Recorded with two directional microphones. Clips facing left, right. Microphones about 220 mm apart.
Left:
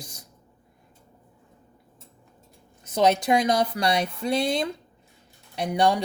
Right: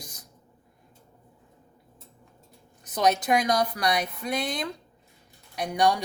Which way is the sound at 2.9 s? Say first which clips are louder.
Left 3 dB; 25° left (ahead or behind).